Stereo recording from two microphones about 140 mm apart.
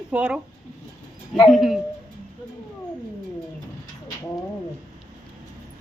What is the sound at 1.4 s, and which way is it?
Dog, centre (ahead or behind).